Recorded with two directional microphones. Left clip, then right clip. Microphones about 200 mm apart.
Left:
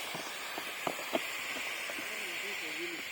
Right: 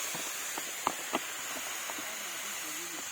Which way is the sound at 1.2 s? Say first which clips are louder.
Left 2 dB; 50° right (ahead or behind).